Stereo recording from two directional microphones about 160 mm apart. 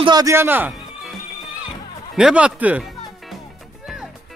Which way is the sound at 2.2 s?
5° right (ahead or behind).